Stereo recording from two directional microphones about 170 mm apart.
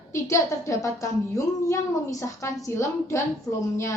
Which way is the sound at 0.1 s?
15° left (ahead or behind).